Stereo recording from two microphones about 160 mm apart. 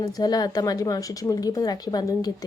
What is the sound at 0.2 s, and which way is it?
Speech, 25° left (ahead or behind).